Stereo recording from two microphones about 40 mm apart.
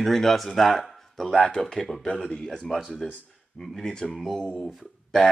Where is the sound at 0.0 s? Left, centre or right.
Centre.